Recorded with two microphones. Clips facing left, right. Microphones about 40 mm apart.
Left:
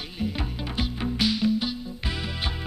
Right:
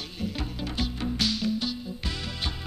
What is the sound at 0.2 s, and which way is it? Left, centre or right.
Music, centre.